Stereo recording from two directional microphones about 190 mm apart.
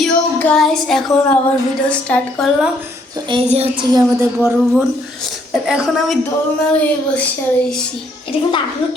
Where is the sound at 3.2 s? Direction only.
25° right (ahead or behind).